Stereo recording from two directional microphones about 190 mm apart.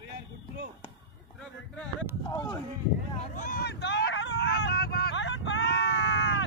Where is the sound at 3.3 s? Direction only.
45° left (ahead or behind); by 6.2 s 65° left (ahead or behind).